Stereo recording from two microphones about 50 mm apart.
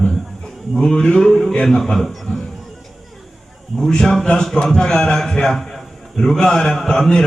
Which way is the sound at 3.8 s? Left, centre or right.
Centre.